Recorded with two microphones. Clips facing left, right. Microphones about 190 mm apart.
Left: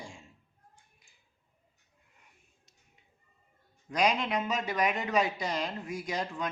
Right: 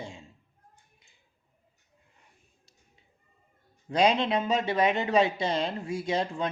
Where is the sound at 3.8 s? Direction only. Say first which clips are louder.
Right 5 dB; 30° right (ahead or behind).